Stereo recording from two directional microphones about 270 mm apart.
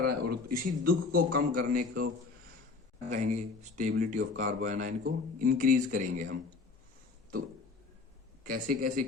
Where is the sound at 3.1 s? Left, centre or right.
Right.